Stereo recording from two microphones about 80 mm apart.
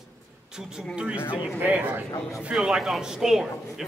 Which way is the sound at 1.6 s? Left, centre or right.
Right.